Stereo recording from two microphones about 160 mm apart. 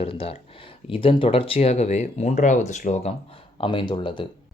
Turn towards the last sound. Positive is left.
turn(degrees=30)  # may be behind; listen again after turning